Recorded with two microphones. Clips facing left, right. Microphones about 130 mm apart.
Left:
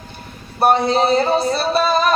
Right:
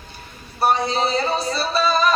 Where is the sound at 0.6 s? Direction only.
55° left (ahead or behind).